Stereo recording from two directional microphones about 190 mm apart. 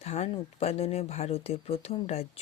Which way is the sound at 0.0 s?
35° left (ahead or behind).